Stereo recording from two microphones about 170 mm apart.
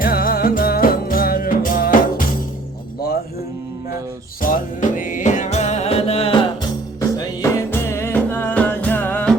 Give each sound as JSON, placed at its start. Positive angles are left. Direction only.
{"t": 0.0, "sound": "music", "side_deg": 60}
{"t": 4.4, "sound": "music", "side_deg": 55}
{"t": 7.2, "sound": "music", "side_deg": 20}